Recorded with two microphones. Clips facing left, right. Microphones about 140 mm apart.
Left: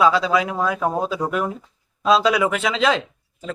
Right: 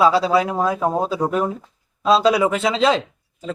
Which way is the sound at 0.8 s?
20° right (ahead or behind).